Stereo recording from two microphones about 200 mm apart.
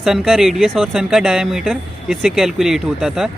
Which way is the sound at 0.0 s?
Centre (ahead or behind).